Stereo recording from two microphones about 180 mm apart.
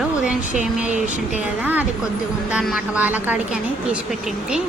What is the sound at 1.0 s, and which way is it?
Speech, 45° left (ahead or behind).